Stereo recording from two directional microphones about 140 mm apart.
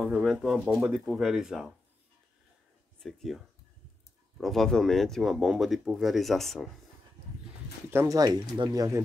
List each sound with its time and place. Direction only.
0.0 s speech: 5° right (ahead or behind)
3.0 s speech: centre (ahead or behind)
7.9 s speech: 20° right (ahead or behind)